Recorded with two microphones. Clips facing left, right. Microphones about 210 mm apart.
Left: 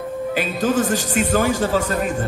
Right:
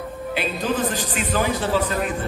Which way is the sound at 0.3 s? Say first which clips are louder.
Left 3 dB; 45° left (ahead or behind).